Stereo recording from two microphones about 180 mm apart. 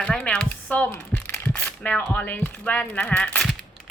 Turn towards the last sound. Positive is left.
turn(degrees=10)  # may be behind; listen again after turning